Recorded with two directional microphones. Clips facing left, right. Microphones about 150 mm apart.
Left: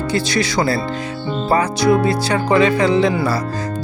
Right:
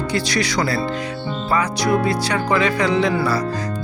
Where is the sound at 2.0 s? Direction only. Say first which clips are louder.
Left 3 dB; 30° left (ahead or behind).